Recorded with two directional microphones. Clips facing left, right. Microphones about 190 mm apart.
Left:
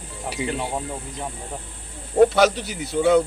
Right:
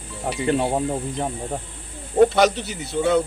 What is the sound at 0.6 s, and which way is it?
Speech, 35° right (ahead or behind).